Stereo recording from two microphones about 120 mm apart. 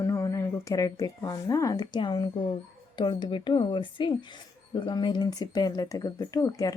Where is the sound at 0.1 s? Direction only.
25° left (ahead or behind).